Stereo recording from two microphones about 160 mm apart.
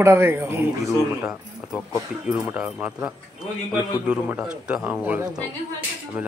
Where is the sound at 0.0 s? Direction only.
15° right (ahead or behind).